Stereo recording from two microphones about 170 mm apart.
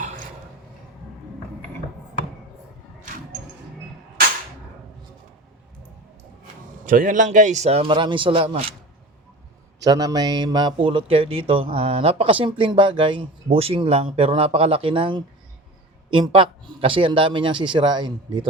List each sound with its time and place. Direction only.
6.8 s speech: 50° right (ahead or behind); by 8.7 s 30° right (ahead or behind)
9.8 s a man's voice: 20° right (ahead or behind)